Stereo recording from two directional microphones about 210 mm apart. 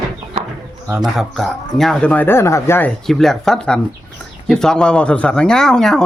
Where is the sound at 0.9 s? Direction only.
Centre (ahead or behind).